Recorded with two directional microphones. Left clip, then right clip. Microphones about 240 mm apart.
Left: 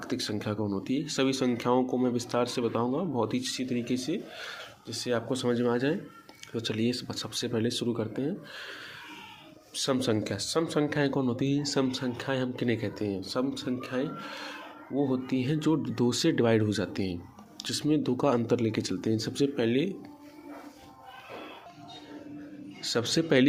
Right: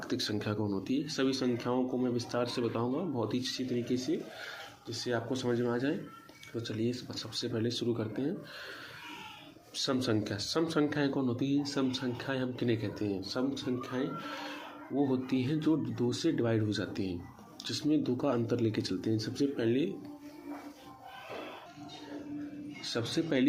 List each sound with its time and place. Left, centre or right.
0.0 s speech: centre
9.8 s speech: left
22.8 s a man's voice: left